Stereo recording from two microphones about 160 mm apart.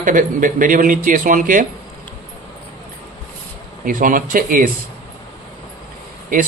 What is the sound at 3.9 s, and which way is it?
Speech, 55° right (ahead or behind).